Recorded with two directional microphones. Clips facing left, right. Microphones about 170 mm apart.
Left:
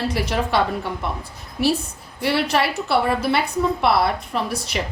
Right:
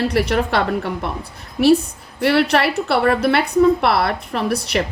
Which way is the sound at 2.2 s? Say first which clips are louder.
Right 4 dB; 65° right (ahead or behind).